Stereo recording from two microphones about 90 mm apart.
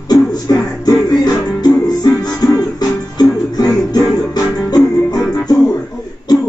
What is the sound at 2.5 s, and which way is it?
Music, 45° left (ahead or behind).